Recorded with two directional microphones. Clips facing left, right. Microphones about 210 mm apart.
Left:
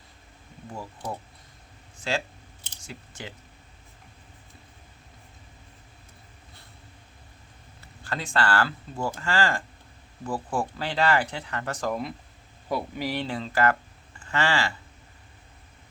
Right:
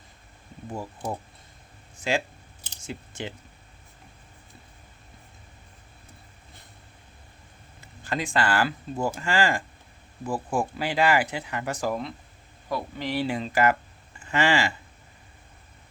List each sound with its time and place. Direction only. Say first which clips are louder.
0.7 s speech: right 3 dB; 20° right (ahead or behind)
8.0 s speech: right 1 dB; 15° right (ahead or behind)
12.6 s speech: left 2 dB; 15° left (ahead or behind)
13.2 s speech: right 2 dB; 15° right (ahead or behind)